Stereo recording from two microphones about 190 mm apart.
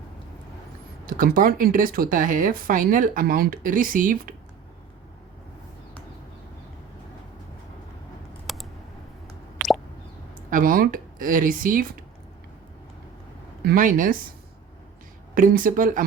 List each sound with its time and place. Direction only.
1.0 s speech: 50° right (ahead or behind)
8.5 s typing: centre (ahead or behind)
9.6 s plop: centre (ahead or behind)
10.5 s speech: 45° right (ahead or behind)
13.7 s speech: 45° right (ahead or behind)
15.4 s speech: 45° right (ahead or behind)